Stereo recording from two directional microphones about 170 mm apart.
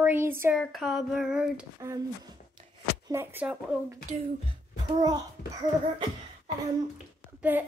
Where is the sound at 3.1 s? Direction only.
15° right (ahead or behind).